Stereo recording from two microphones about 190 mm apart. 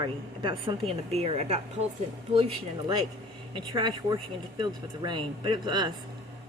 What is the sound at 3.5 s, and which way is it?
A woman's voice, 25° right (ahead or behind).